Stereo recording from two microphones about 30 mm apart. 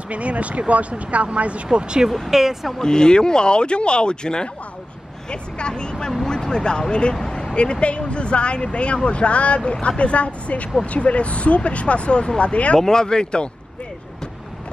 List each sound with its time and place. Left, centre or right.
0.1 s speech: right
1.7 s speech: right
2.3 s speech: centre
2.8 s speech: left
12.7 s speech: left